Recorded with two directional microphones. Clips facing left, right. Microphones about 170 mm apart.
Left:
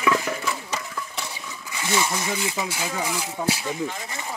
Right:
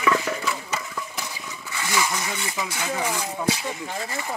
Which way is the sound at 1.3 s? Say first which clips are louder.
Right 1 dB; 20° left (ahead or behind).